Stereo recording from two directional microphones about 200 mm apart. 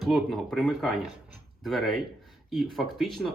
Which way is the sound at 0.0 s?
Centre (ahead or behind).